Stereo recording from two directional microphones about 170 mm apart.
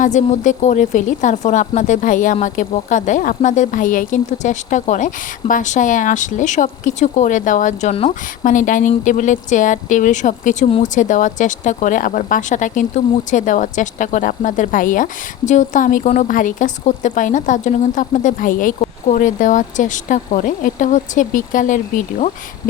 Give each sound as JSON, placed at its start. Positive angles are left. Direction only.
{"t": 0.0, "sound": "speech", "side_deg": 45}